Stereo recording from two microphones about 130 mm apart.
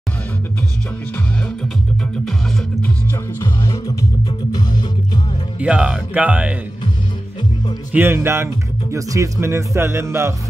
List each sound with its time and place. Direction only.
3.1 s music: 30° left (ahead or behind)
5.6 s speech: 10° right (ahead or behind)
7.9 s speech: 15° right (ahead or behind)